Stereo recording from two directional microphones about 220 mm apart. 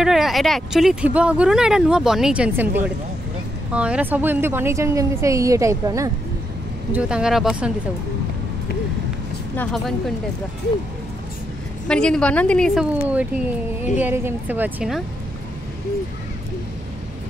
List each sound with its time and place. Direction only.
0.0 s a woman's voice: centre (ahead or behind)
6.9 s speech: 5° right (ahead or behind)
9.6 s speech: centre (ahead or behind)
11.9 s a woman's voice: 5° left (ahead or behind)